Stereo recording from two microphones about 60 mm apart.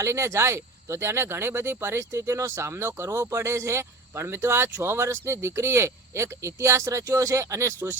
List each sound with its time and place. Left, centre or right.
0.0 s speech: right